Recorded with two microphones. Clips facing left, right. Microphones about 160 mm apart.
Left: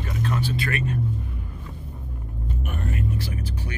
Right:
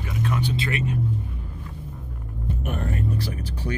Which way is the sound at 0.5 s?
20° right (ahead or behind).